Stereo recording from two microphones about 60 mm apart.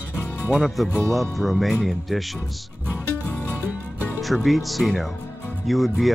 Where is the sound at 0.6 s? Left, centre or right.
Centre.